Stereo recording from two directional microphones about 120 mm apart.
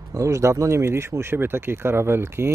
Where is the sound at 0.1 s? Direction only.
25° right (ahead or behind).